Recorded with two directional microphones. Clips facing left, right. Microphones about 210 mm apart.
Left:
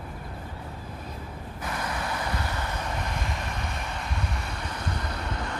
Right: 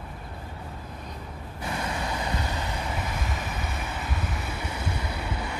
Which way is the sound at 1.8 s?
20° right (ahead or behind).